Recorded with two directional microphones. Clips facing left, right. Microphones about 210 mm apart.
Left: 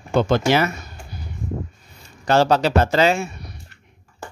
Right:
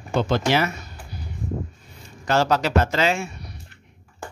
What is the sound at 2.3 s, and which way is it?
A man's voice, 30° left (ahead or behind).